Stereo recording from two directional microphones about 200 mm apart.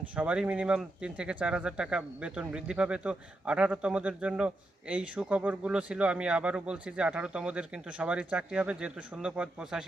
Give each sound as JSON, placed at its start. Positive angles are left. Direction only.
{"t": 0.2, "sound": "speech", "side_deg": -5}